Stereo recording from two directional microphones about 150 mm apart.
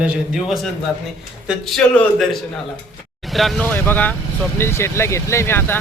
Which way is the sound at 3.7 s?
10° left (ahead or behind).